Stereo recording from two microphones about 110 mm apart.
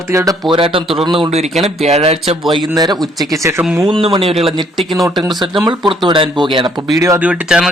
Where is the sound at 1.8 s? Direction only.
70° right (ahead or behind).